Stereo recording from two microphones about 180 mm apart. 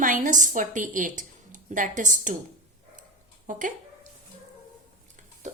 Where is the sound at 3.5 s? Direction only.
45° right (ahead or behind).